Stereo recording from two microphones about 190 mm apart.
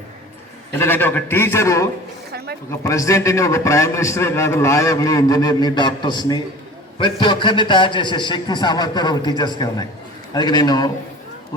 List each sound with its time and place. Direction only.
0.8 s a man's voice: 10° left (ahead or behind)